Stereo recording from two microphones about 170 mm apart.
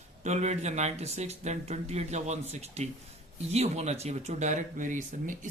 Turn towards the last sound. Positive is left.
turn(degrees=-50)  # may be behind; listen again after turning